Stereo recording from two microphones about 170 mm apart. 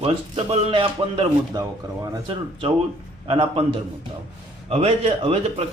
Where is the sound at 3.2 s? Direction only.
30° right (ahead or behind).